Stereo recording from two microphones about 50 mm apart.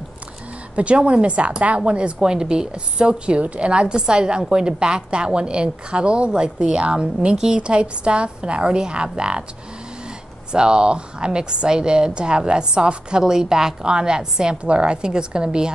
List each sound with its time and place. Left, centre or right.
0.7 s a woman's voice: right
10.5 s a woman's voice: centre